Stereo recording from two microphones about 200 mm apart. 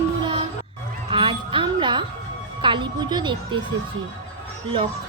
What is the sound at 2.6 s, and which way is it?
Speech, 25° right (ahead or behind).